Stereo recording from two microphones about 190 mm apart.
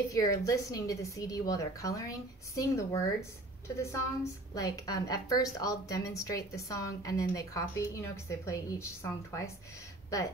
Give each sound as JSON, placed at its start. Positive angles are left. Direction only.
{"t": 0.1, "sound": "a woman's voice", "side_deg": 20}